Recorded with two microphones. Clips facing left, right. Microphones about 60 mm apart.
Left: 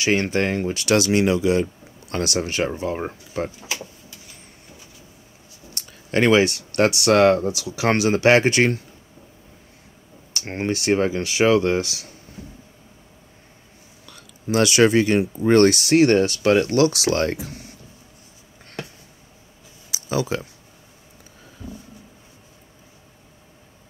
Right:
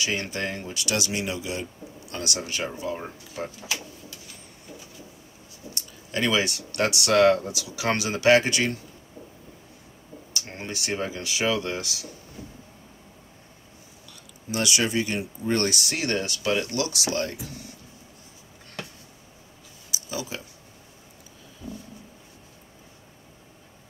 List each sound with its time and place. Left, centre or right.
0.0 s speech: left
5.8 s speech: left
10.3 s speech: left
14.0 s speech: left
19.9 s a sound: left